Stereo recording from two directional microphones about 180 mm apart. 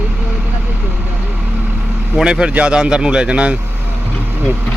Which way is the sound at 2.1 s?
5° right (ahead or behind).